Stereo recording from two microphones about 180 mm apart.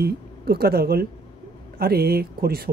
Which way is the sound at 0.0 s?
60° right (ahead or behind).